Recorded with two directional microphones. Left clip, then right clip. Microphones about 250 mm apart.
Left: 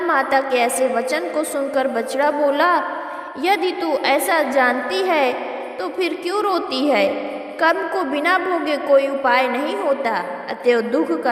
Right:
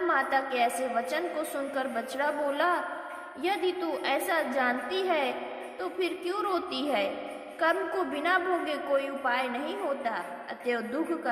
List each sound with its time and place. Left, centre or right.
0.1 s a woman's voice: left